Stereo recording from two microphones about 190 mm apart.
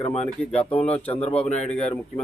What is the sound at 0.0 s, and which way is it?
Speech, 35° left (ahead or behind).